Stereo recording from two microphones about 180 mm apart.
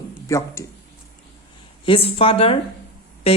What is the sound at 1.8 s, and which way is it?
Speech, 30° left (ahead or behind).